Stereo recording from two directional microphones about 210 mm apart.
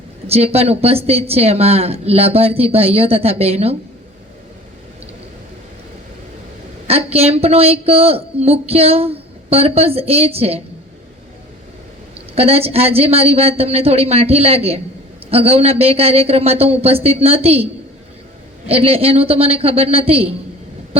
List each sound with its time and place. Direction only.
0.3 s a woman's voice: 30° right (ahead or behind)
6.8 s a woman's voice: 30° right (ahead or behind)
12.3 s a woman's voice: 30° right (ahead or behind)
18.6 s a woman's voice: 25° right (ahead or behind)